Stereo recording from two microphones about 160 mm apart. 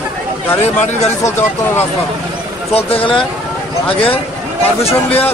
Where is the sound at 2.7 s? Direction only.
35° left (ahead or behind).